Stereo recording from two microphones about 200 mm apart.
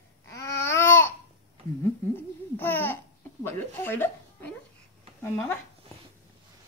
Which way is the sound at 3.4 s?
10° left (ahead or behind).